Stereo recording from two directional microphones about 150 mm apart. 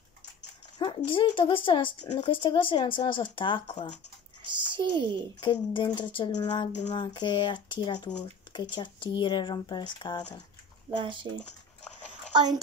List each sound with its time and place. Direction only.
0.7 s speech: 30° left (ahead or behind)
4.5 s speech: 30° right (ahead or behind)
5.4 s speech: 30° left (ahead or behind)
10.9 s speech: 35° right (ahead or behind)
12.4 s a child's voice: 25° right (ahead or behind)